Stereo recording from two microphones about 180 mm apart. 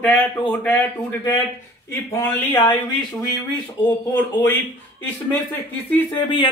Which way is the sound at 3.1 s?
10° left (ahead or behind).